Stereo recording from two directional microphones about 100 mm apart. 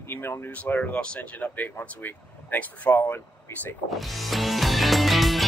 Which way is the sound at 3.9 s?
Centre (ahead or behind).